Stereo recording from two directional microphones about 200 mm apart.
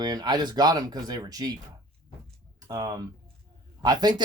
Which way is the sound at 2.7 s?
15° right (ahead or behind).